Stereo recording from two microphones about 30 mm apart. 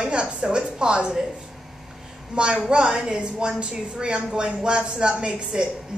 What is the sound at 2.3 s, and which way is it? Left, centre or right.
A woman's voice, right.